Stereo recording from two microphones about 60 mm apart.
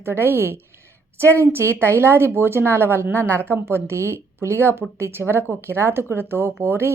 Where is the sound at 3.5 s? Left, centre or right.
Right.